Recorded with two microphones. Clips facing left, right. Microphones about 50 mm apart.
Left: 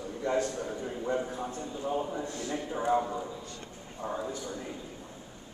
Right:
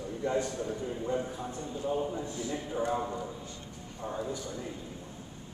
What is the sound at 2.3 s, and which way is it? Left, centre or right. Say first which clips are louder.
Speech: even; left.